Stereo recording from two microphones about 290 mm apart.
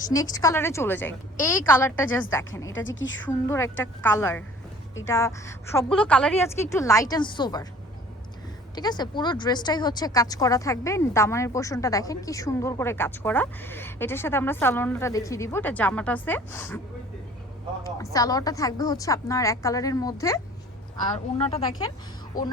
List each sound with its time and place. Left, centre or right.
0.1 s speech: centre
2.7 s a woman's voice: left
3.2 s speech: centre
8.7 s speech: centre
17.8 s speech: centre